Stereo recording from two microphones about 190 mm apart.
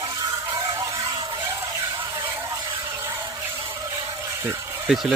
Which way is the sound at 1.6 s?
15° right (ahead or behind).